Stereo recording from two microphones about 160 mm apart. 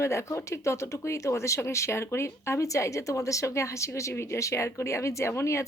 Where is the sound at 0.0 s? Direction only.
15° left (ahead or behind).